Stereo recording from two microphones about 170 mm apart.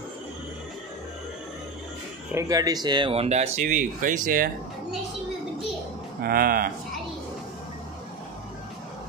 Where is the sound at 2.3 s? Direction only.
20° right (ahead or behind); by 3.4 s 40° right (ahead or behind).